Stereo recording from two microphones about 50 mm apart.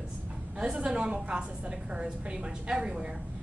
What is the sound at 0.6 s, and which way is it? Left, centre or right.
A woman's voice, centre.